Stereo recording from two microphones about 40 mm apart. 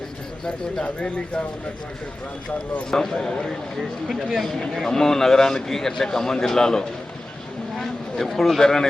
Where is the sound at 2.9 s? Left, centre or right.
Centre.